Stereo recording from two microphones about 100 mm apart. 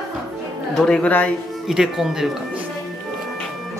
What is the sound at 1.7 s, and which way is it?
Speech, 5° right (ahead or behind).